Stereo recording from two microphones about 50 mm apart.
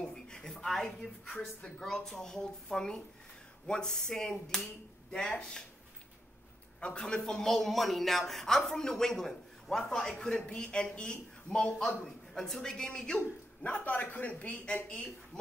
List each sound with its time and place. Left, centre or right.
0.0 s a sound: centre
1.0 s a man's voice: left
6.8 s a man's voice: centre
13.7 s a man's voice: left